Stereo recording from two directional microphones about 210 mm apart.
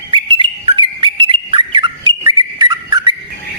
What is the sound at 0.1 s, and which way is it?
Bird, 25° right (ahead or behind).